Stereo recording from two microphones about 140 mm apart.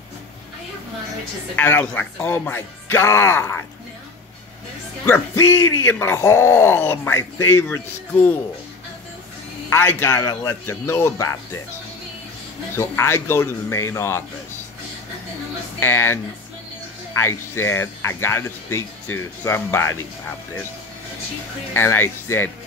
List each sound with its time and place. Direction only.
1.6 s speech: 15° left (ahead or behind)
5.0 s speech: 15° left (ahead or behind)
9.7 s speech: 15° left (ahead or behind)
12.7 s speech: 20° left (ahead or behind)
15.8 s speech: 15° left (ahead or behind)
21.7 s speech: 15° left (ahead or behind)